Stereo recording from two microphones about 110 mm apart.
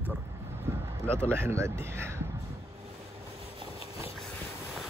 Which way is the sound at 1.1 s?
20° right (ahead or behind).